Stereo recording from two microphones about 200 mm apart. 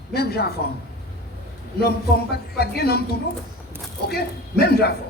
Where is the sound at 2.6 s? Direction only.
50° left (ahead or behind).